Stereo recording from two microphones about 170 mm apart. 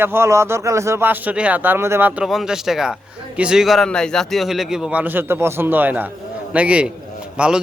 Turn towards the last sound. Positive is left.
turn(degrees=-5)  # may be behind; listen again after turning